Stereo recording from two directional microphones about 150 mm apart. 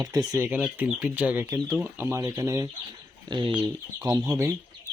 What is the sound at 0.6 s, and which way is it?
Speech, 5° right (ahead or behind).